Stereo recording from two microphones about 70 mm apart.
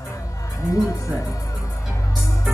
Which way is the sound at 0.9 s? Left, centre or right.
Left.